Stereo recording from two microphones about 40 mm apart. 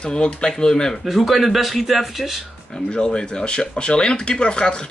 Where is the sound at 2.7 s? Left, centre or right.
Left.